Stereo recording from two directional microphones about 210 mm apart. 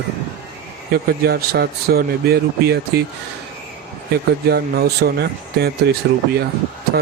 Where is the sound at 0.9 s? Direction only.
45° right (ahead or behind).